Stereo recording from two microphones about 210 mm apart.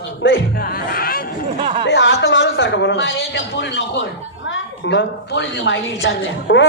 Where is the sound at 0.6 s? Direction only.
45° left (ahead or behind).